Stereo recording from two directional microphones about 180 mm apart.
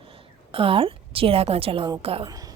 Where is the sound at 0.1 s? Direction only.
30° right (ahead or behind).